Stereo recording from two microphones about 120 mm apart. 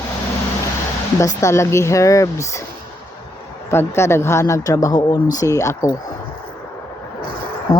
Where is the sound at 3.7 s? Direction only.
20° left (ahead or behind).